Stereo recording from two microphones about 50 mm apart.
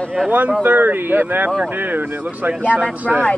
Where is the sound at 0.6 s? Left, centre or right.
Right.